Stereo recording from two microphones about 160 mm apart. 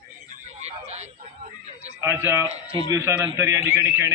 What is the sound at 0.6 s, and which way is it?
Speech, 45° right (ahead or behind).